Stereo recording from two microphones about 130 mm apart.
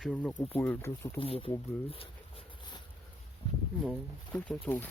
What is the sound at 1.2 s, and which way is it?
Speech, 45° left (ahead or behind).